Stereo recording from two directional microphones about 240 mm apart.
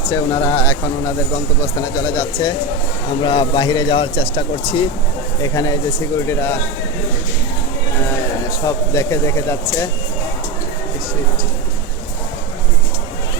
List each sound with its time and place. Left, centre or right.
0.0 s speech: centre
8.4 s speech: centre